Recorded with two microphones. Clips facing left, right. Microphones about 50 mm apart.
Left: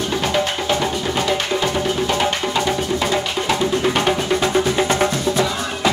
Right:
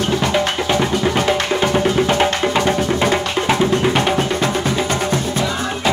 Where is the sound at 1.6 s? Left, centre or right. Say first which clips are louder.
Right 4 dB; right.